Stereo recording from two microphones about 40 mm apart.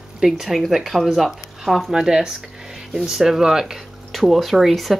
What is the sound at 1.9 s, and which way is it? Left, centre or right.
Speech, centre.